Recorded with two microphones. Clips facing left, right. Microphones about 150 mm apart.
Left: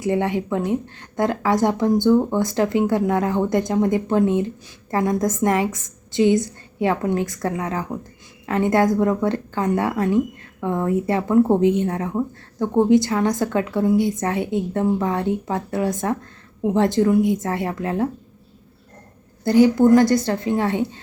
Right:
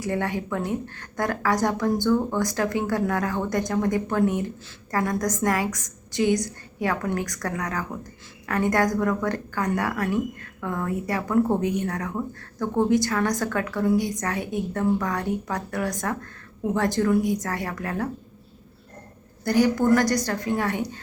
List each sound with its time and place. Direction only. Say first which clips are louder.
0.0 s speech: left 6 dB; 20° left (ahead or behind)
19.5 s speech: left 6 dB; 20° left (ahead or behind)